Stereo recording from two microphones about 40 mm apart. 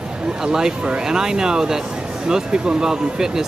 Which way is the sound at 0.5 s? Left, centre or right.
Centre.